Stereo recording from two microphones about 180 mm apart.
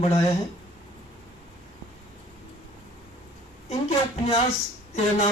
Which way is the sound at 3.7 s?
35° left (ahead or behind).